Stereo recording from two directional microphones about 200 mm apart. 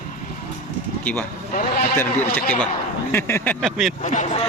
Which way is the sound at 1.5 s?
50° left (ahead or behind).